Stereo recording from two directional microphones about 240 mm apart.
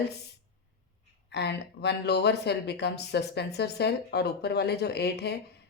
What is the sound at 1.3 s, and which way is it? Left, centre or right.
Speech, left.